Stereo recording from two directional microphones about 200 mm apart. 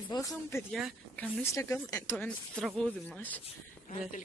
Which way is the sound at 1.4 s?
15° left (ahead or behind).